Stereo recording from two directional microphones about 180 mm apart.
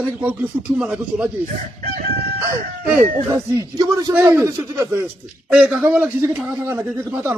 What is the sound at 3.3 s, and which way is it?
A man's voice, 15° right (ahead or behind).